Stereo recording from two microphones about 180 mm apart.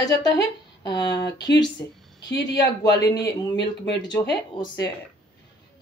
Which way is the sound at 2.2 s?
70° left (ahead or behind).